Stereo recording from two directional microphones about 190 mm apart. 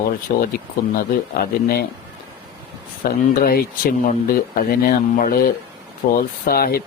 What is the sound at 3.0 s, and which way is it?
Speech, 50° left (ahead or behind).